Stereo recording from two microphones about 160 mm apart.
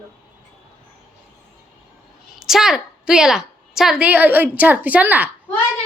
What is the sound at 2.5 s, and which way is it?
A woman's voice, centre (ahead or behind).